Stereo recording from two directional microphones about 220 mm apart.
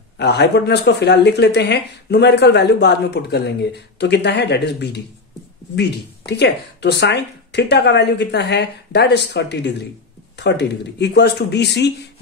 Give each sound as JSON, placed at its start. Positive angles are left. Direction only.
{"t": 0.2, "sound": "speech", "side_deg": 50}